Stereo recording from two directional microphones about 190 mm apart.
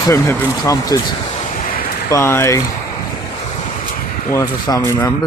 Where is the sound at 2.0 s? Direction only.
15° left (ahead or behind).